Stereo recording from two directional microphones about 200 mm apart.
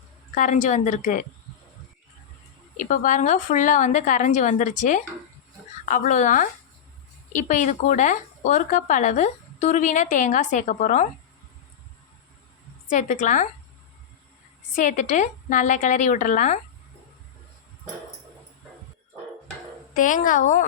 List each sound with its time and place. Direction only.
0.3 s a woman's voice: 40° left (ahead or behind)
2.7 s a woman's voice: 40° left (ahead or behind)
12.9 s a woman's voice: 40° left (ahead or behind)
14.8 s a woman's voice: 40° left (ahead or behind)
19.9 s a woman's voice: 40° left (ahead or behind)